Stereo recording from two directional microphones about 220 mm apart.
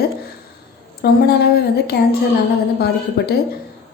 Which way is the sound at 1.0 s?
45° left (ahead or behind).